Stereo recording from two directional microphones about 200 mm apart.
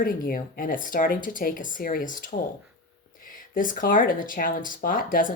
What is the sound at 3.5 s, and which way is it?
Speech, 45° left (ahead or behind).